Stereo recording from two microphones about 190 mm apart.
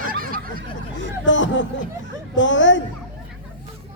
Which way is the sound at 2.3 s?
75° left (ahead or behind).